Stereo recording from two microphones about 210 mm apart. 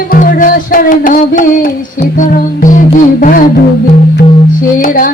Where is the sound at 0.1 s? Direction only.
40° left (ahead or behind).